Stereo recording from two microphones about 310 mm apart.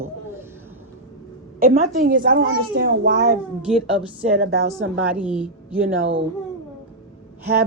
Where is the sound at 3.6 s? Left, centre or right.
Centre.